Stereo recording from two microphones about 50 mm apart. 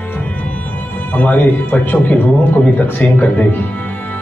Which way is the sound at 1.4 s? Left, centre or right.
Left.